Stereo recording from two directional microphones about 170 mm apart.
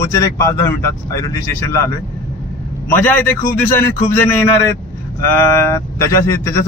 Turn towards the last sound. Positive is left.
turn(degrees=15)  # may be behind; listen again after turning